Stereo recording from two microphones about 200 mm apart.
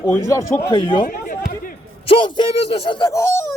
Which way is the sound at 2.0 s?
25° left (ahead or behind).